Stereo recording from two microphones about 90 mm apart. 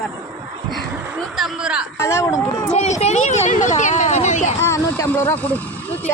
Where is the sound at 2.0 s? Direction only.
35° left (ahead or behind).